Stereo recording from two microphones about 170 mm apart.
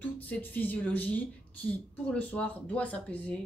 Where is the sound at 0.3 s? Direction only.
10° left (ahead or behind).